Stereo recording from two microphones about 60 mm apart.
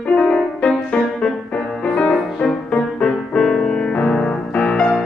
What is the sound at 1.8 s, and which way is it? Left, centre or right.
Music, centre.